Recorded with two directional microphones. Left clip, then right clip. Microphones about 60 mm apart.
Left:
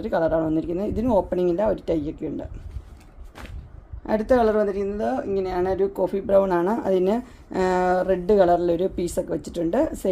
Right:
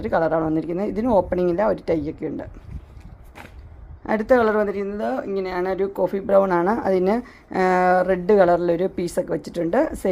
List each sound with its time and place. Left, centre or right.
0.0 s speech: right
4.0 s a woman's voice: right